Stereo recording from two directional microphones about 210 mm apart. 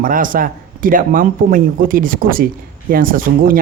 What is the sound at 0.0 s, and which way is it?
Speech, 40° right (ahead or behind).